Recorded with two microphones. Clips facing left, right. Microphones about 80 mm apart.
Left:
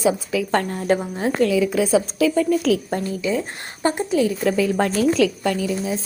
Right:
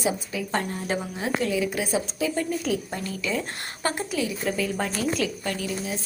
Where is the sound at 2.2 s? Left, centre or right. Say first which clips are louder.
Left 8 dB; left.